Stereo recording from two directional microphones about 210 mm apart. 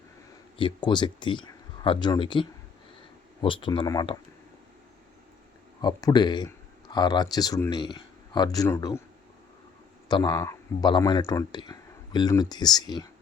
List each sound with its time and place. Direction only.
0.5 s speech: 25° left (ahead or behind)
5.8 s speech: 20° left (ahead or behind)
10.1 s speech: 20° left (ahead or behind)